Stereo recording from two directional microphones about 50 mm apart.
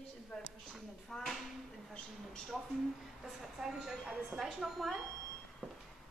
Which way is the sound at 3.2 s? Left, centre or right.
Centre.